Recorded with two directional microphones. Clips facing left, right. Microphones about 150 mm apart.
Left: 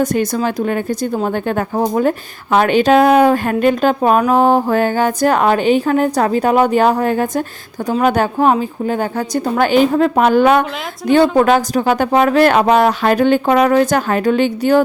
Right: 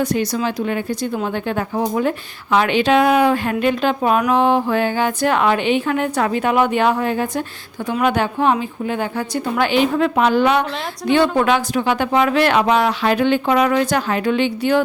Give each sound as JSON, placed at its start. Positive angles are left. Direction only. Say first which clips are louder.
{"t": 0.0, "sound": "speech", "louder": "left 3 dB", "side_deg": 45}